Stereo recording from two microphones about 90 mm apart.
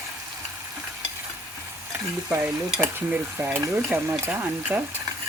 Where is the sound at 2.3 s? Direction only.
20° right (ahead or behind).